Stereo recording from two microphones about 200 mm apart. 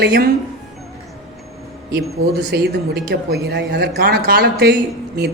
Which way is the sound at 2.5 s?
55° right (ahead or behind).